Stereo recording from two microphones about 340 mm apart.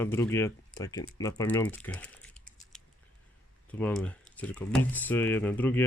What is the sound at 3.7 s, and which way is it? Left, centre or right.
Speech, centre.